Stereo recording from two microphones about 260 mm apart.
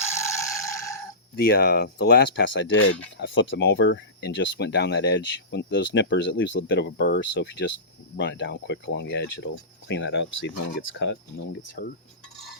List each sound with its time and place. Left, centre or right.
0.0 s mechanisms: centre
1.4 s speech: left